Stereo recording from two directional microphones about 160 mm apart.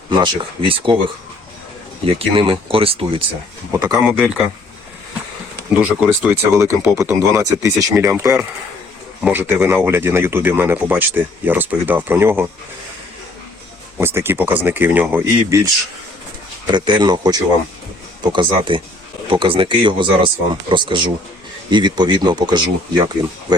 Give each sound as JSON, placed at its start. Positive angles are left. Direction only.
{"t": 0.1, "sound": "speech", "side_deg": -30}
{"t": 2.0, "sound": "speech", "side_deg": -35}
{"t": 3.7, "sound": "speech", "side_deg": -25}
{"t": 3.9, "sound": "speech", "side_deg": -5}
{"t": 5.7, "sound": "speech", "side_deg": -10}
{"t": 14.0, "sound": "speech", "side_deg": -15}
{"t": 16.6, "sound": "speech", "side_deg": -30}